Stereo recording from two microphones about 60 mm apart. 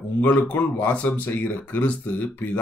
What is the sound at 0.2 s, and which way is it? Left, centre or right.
Speech, left.